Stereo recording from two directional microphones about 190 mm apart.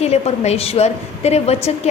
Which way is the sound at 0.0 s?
35° left (ahead or behind).